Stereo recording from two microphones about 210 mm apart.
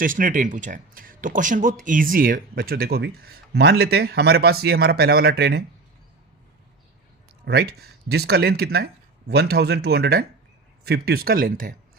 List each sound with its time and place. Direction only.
0.0 s speech: 40° right (ahead or behind)
7.4 s speech: 50° right (ahead or behind)